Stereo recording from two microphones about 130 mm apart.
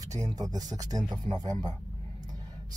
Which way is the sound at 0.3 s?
30° right (ahead or behind).